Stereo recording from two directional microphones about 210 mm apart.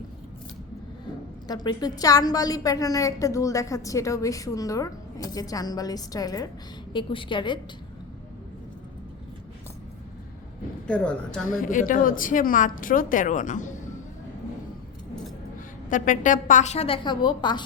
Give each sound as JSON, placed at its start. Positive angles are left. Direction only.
{"t": 1.5, "sound": "a woman's voice", "side_deg": 20}
{"t": 10.8, "sound": "a woman's voice", "side_deg": 5}
{"t": 11.4, "sound": "a woman's voice", "side_deg": 40}
{"t": 15.9, "sound": "a woman's voice", "side_deg": 40}